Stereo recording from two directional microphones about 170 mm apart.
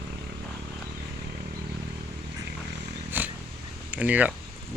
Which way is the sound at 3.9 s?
10° right (ahead or behind).